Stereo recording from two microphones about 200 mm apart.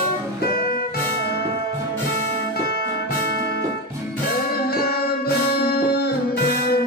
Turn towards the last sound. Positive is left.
turn(degrees=50)  # may be behind; listen again after turning